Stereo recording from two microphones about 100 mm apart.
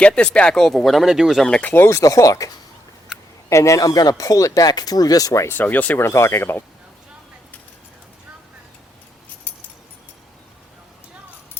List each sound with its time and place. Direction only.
0.2 s speech: 10° left (ahead or behind)
1.5 s speech: 10° left (ahead or behind)
1.7 s speech: 25° left (ahead or behind)
3.5 s speech: 30° left (ahead or behind)
5.5 s speech: 15° left (ahead or behind)
6.1 s speech: 30° left (ahead or behind)